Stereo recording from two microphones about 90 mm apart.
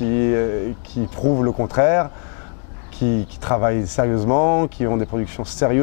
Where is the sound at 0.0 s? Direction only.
15° left (ahead or behind).